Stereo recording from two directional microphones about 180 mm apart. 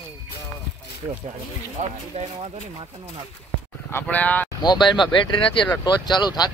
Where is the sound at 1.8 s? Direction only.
40° right (ahead or behind).